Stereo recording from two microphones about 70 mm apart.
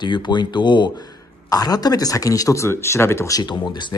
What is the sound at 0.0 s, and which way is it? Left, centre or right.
Speech, left.